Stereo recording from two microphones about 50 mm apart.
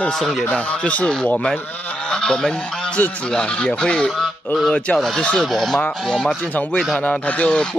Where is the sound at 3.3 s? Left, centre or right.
Centre.